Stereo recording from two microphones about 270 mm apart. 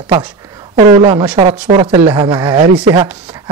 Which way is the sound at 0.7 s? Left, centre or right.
Right.